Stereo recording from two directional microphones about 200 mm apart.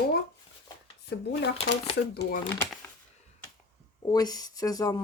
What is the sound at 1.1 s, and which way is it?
Speech, 60° left (ahead or behind).